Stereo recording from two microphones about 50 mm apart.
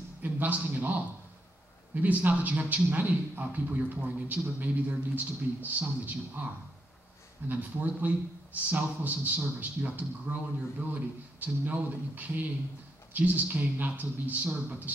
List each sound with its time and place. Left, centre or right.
0.2 s a man's voice: right